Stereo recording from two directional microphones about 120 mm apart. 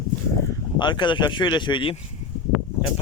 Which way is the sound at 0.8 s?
40° left (ahead or behind).